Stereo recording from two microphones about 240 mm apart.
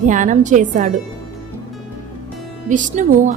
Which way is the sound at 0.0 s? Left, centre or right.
Right.